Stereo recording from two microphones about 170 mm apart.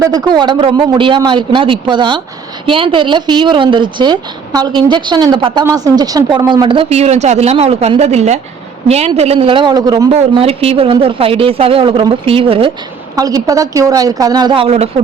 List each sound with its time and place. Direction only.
0.0 s a woman's voice: 25° right (ahead or behind)
10.1 s a woman's voice: 35° right (ahead or behind)
13.1 s speech: 20° right (ahead or behind)